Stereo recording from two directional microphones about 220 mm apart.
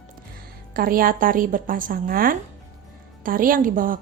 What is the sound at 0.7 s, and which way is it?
A woman's voice, 40° right (ahead or behind).